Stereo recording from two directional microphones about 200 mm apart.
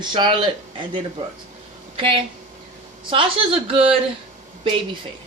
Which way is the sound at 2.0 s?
25° right (ahead or behind).